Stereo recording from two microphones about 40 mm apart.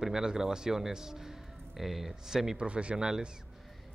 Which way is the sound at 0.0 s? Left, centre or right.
Centre.